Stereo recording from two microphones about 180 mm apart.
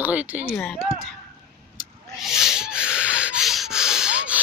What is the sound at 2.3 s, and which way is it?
Rub, 5° right (ahead or behind).